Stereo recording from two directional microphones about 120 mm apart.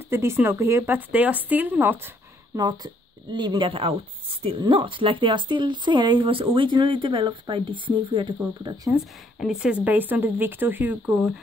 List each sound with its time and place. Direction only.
0.1 s speech: 20° right (ahead or behind)
2.5 s speech: 30° right (ahead or behind)
8.9 s speech: 5° right (ahead or behind)